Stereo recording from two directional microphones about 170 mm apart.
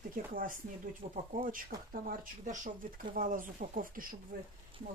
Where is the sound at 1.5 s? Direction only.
55° right (ahead or behind).